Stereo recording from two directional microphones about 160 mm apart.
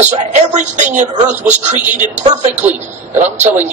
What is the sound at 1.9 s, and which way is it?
Speech, 50° right (ahead or behind).